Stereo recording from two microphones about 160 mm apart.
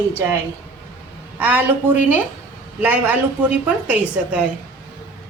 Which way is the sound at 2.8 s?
10° right (ahead or behind).